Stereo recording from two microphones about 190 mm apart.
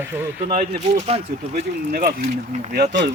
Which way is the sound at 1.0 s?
30° right (ahead or behind).